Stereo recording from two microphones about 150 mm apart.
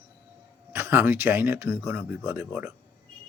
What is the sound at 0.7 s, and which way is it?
Speech, 15° right (ahead or behind).